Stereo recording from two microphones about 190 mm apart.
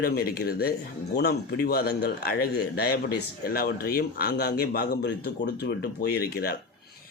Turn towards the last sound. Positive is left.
turn(degrees=55)  # may be behind; listen again after turning